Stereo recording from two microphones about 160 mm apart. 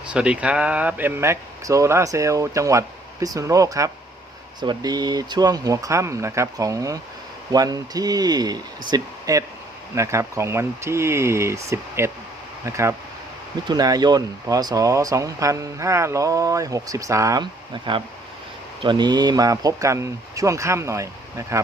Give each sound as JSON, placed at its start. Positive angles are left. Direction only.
{"t": 0.1, "sound": "speech", "side_deg": -5}